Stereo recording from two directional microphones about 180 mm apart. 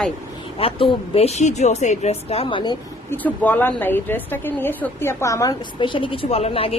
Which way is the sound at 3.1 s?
10° left (ahead or behind).